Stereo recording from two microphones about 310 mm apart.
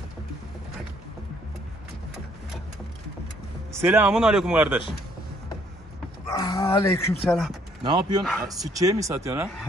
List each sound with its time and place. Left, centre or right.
3.8 s speech: centre
6.2 s livestock: centre
7.8 s speech: centre
8.2 s speech: centre
8.7 s speech: centre